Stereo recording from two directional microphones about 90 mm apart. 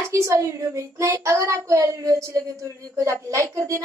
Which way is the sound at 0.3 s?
35° right (ahead or behind).